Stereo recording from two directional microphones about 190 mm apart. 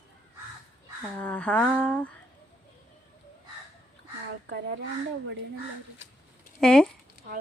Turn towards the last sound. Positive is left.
turn(degrees=5)  # may be behind; listen again after turning